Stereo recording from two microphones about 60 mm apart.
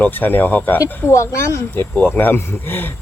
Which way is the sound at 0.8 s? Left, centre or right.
Left.